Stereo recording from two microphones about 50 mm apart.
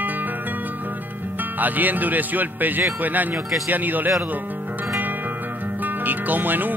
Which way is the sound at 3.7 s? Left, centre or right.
Right.